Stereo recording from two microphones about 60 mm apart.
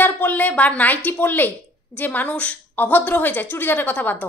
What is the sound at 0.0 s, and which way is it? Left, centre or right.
A woman's voice, left.